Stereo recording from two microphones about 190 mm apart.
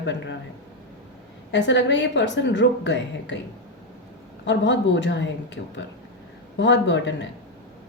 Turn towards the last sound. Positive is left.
turn(degrees=70)  # may be behind; listen again after turning